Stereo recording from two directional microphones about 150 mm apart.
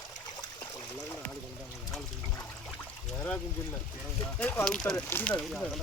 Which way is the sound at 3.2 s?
10° left (ahead or behind).